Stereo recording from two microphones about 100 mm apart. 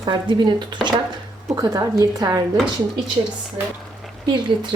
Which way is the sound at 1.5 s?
35° right (ahead or behind).